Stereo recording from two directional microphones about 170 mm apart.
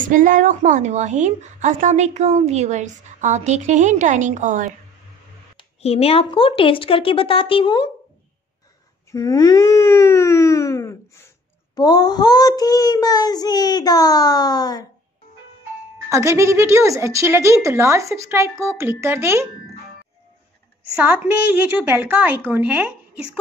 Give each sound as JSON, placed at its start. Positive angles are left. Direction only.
{"t": 0.1, "sound": "a woman's voice", "side_deg": -50}
{"t": 5.6, "sound": "speech", "side_deg": 35}
{"t": 9.1, "sound": "a child's voice", "side_deg": 20}
{"t": 16.1, "sound": "a woman's voice", "side_deg": -15}
{"t": 20.9, "sound": "a woman's voice", "side_deg": -10}